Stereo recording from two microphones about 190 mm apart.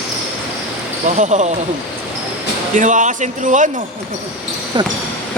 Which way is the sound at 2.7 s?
40° right (ahead or behind).